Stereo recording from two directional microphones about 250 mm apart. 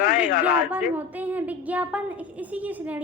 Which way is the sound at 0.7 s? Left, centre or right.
Centre.